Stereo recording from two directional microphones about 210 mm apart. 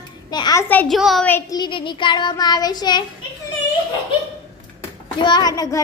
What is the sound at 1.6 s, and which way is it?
A woman's voice, 20° left (ahead or behind).